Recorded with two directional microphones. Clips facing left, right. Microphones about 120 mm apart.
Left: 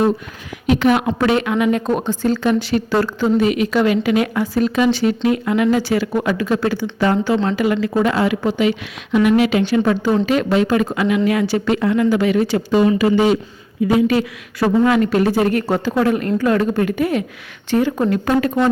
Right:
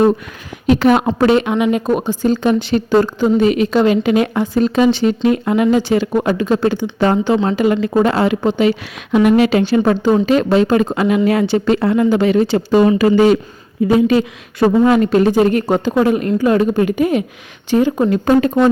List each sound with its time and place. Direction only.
0.7 s speech: 35° right (ahead or behind)
1.4 s a woman's voice: 25° right (ahead or behind)
1.9 s a woman's voice: 10° right (ahead or behind)
3.4 s a woman's voice: 35° right (ahead or behind)
9.1 s speech: 40° right (ahead or behind)
13.0 s speech: 45° right (ahead or behind)
13.8 s a woman's voice: 25° right (ahead or behind)